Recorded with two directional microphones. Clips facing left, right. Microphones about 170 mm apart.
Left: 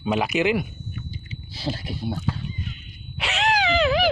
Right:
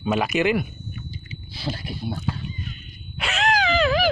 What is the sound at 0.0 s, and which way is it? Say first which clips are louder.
Speech: right 1 dB; 15° left (ahead or behind).